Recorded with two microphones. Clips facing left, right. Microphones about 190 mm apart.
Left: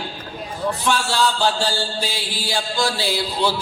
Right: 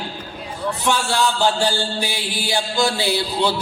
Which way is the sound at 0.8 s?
15° right (ahead or behind).